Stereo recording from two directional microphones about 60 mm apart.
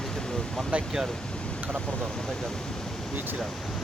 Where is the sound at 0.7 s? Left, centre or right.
Centre.